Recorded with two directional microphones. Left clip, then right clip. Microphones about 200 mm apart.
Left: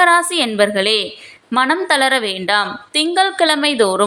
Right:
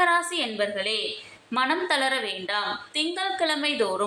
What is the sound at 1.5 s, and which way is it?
A woman's voice, 35° left (ahead or behind).